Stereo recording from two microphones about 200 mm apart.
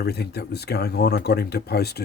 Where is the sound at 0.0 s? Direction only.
55° left (ahead or behind).